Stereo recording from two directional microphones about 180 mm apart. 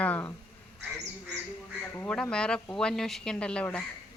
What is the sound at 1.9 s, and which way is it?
Speech, 5° left (ahead or behind).